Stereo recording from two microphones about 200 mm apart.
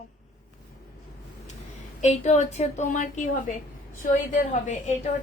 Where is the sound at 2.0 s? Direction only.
35° left (ahead or behind).